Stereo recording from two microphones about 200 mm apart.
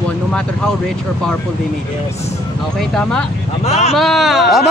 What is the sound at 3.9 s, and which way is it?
Speech, centre (ahead or behind).